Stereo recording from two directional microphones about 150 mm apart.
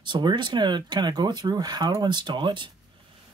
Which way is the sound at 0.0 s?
30° right (ahead or behind).